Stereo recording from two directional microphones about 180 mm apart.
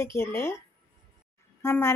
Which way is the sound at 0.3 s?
15° left (ahead or behind).